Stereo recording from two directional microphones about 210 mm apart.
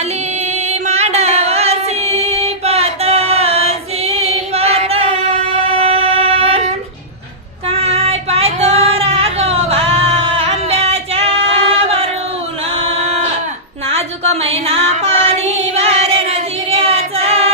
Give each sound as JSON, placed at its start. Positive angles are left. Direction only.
{"t": 0.0, "sound": "music", "side_deg": -35}
{"t": 5.7, "sound": "a sound", "side_deg": -25}
{"t": 7.7, "sound": "child singing", "side_deg": -30}
{"t": 13.8, "sound": "music", "side_deg": -30}